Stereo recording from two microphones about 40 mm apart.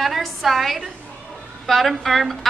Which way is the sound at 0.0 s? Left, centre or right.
Centre.